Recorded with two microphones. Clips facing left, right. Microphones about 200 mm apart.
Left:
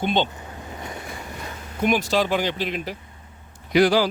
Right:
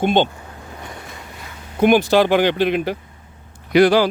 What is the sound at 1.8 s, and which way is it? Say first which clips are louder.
Speech: right 7 dB; 60° right (ahead or behind).